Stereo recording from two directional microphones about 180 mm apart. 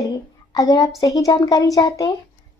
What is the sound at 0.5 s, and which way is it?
A woman's voice, 20° left (ahead or behind).